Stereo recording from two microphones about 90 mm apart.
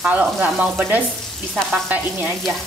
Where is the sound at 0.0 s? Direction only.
15° right (ahead or behind).